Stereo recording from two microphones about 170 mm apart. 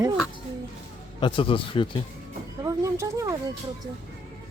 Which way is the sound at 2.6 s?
20° right (ahead or behind).